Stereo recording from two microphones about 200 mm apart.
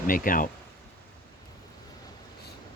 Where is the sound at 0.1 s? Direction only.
45° left (ahead or behind).